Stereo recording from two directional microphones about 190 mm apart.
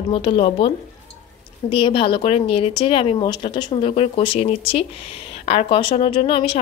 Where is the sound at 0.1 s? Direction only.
30° left (ahead or behind).